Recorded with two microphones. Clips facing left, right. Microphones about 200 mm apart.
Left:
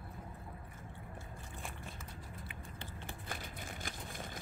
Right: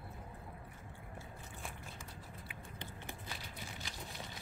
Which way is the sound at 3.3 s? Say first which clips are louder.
Left 3 dB; 50° left (ahead or behind).